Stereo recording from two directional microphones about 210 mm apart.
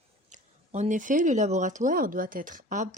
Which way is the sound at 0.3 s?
35° right (ahead or behind).